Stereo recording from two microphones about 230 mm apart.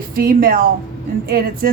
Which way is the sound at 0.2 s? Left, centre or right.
Right.